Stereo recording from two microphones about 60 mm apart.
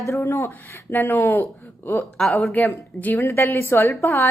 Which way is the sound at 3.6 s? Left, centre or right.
Left.